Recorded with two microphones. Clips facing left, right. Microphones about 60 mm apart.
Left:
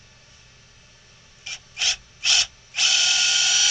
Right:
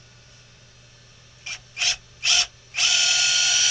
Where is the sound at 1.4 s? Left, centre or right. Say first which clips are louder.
Even; right.